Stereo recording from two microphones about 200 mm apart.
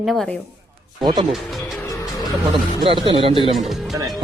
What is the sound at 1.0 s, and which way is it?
Speech, 20° right (ahead or behind).